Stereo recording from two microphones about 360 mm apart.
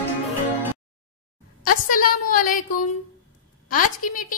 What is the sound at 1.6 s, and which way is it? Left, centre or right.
A woman's voice, left.